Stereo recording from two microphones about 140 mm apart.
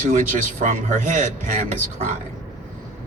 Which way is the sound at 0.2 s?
65° right (ahead or behind).